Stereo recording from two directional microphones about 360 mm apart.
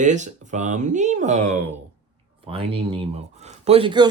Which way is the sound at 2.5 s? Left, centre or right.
Centre.